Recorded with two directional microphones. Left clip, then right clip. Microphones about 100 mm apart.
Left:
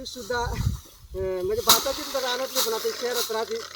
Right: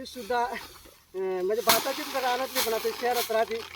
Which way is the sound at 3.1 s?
10° right (ahead or behind).